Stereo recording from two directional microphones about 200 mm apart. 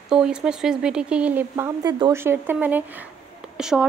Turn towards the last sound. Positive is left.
turn(degrees=-5)  # may be behind; listen again after turning